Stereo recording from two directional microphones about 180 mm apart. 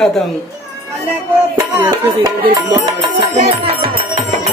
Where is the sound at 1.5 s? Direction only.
10° right (ahead or behind).